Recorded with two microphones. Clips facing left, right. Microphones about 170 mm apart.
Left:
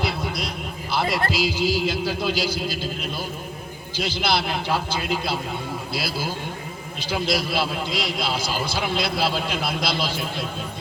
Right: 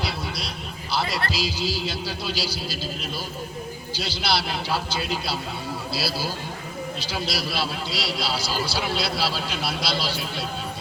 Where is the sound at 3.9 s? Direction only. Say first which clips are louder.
Left 3 dB; 50° left (ahead or behind).